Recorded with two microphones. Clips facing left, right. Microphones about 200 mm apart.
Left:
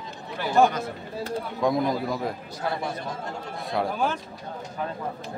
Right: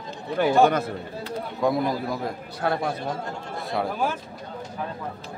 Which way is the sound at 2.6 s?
60° right (ahead or behind).